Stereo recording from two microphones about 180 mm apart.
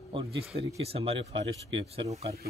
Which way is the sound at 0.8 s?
35° right (ahead or behind).